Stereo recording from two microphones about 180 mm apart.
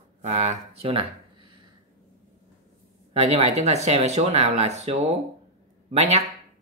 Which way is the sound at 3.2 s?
35° right (ahead or behind).